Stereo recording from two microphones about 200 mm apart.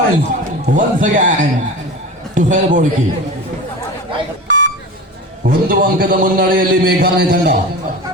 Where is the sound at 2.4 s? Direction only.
40° right (ahead or behind).